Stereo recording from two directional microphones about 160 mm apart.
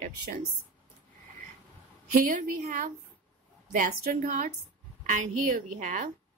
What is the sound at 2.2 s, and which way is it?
A woman's voice, 55° right (ahead or behind).